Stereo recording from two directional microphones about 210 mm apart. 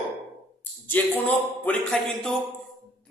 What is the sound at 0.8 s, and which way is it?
Speech, 5° left (ahead or behind).